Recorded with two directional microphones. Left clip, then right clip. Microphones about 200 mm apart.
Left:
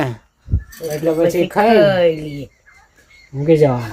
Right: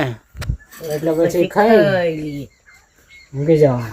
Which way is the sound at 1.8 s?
50° left (ahead or behind).